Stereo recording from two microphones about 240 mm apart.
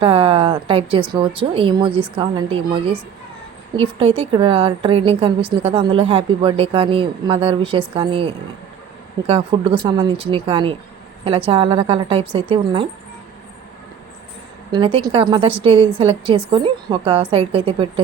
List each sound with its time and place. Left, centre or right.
0.0 s a woman's voice: right
14.7 s a woman's voice: right